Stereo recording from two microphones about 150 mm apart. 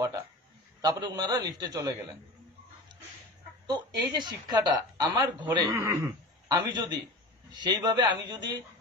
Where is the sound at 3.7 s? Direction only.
30° right (ahead or behind).